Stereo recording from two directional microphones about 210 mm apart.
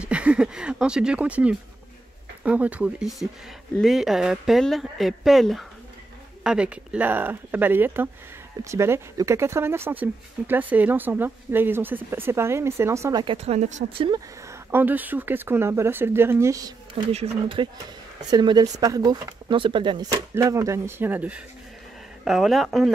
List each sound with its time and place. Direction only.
0.0 s speech: 5° right (ahead or behind); by 14.2 s 25° right (ahead or behind)
14.5 s speech: 10° right (ahead or behind)
17.1 s speech: 25° right (ahead or behind); by 22.8 s centre (ahead or behind)